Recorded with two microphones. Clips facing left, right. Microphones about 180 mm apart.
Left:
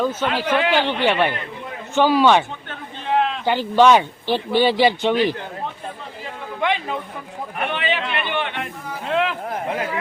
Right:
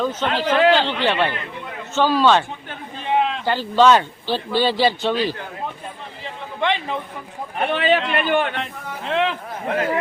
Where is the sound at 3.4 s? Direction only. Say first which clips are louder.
Left 2 dB; 15° left (ahead or behind).